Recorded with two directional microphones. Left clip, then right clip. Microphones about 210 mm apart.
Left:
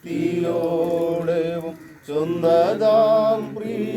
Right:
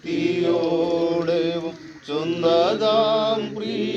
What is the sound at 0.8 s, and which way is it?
Mantra, 55° left (ahead or behind).